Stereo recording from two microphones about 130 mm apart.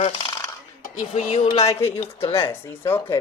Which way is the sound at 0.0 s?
50° left (ahead or behind).